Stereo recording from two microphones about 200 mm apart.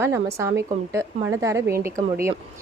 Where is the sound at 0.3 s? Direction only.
15° right (ahead or behind).